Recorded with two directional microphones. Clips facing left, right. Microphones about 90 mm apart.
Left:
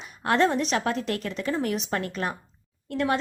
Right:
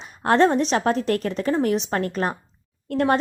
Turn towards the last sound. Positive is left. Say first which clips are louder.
# right 5 dB
turn(degrees=-45)  # may be behind; listen again after turning